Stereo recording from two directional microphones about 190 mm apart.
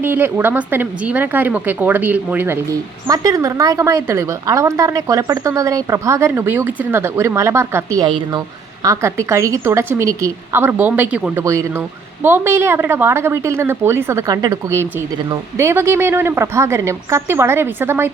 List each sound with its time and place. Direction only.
0.0 s a woman's voice: 10° right (ahead or behind)